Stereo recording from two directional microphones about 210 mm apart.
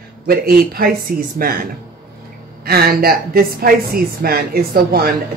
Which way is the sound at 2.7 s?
45° right (ahead or behind).